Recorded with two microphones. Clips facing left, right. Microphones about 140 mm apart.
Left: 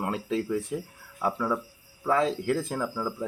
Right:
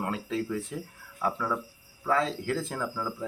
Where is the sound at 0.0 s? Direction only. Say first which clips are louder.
Left 2 dB; 20° left (ahead or behind).